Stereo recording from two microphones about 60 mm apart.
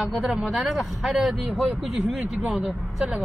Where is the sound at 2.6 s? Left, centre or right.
Centre.